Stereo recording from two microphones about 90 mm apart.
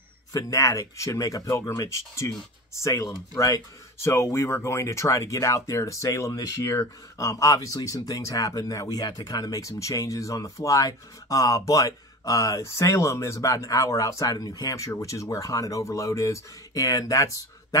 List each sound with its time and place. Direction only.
0.3 s speech: 40° left (ahead or behind)